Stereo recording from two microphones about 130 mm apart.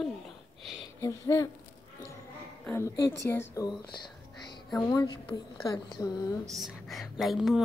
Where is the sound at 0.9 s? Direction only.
25° left (ahead or behind).